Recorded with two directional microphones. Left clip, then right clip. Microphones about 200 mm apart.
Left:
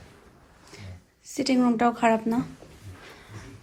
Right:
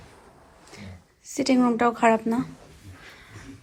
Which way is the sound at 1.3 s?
5° left (ahead or behind).